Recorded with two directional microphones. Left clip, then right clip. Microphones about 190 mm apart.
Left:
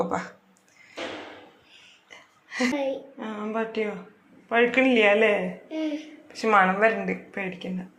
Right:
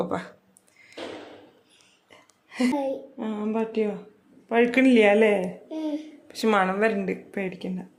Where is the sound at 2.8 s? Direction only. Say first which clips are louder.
Even; 35° right (ahead or behind).